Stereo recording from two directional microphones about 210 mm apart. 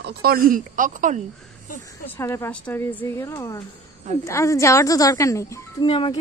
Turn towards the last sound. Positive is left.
turn(degrees=20)  # may be behind; listen again after turning